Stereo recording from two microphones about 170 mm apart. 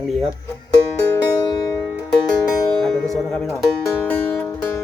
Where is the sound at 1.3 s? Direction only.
25° left (ahead or behind).